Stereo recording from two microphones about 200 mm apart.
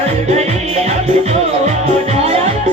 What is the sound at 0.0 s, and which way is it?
Music, 35° right (ahead or behind).